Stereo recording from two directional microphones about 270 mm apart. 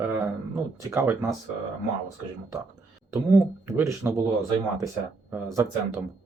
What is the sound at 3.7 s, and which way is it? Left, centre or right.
Speech, centre.